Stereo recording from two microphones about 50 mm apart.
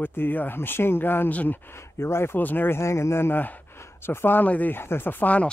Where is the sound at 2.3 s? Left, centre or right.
Left.